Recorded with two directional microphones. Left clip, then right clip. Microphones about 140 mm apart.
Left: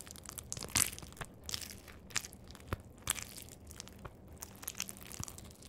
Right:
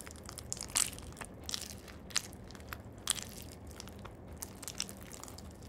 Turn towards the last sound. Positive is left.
turn(degrees=30)  # may be behind; listen again after turning